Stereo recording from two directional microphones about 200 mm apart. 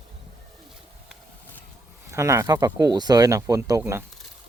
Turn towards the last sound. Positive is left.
turn(degrees=-15)  # may be behind; listen again after turning